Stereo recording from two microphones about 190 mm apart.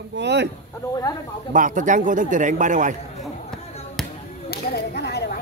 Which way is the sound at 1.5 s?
45° right (ahead or behind).